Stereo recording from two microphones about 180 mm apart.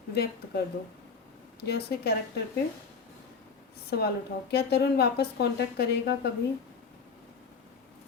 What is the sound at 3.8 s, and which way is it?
A woman's voice, 60° left (ahead or behind).